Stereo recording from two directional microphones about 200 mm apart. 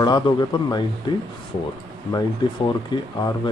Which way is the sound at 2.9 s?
25° left (ahead or behind).